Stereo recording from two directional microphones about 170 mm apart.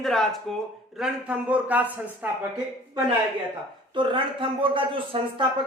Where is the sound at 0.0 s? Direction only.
Centre (ahead or behind).